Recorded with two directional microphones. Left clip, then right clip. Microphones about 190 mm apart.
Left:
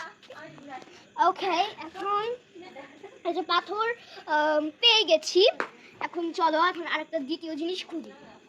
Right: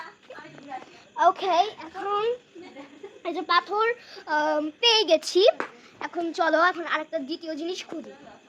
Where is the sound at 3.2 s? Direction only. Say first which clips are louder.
Right 3 dB; 40° right (ahead or behind).